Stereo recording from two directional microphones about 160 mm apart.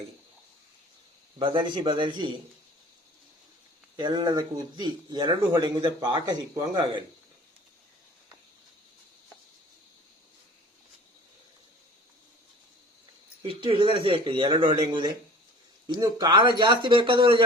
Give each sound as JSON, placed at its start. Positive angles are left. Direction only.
{"t": 1.4, "sound": "speech", "side_deg": -30}
{"t": 3.9, "sound": "speech", "side_deg": -25}
{"t": 13.4, "sound": "speech", "side_deg": -30}